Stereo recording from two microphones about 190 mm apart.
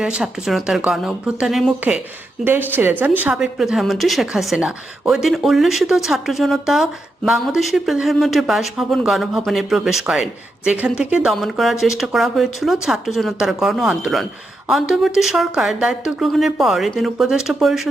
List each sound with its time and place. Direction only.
0.0 s a woman's voice: 5° right (ahead or behind)